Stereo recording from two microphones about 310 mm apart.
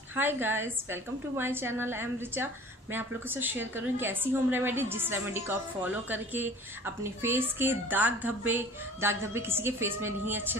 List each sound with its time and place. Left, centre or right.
0.1 s a woman's voice: centre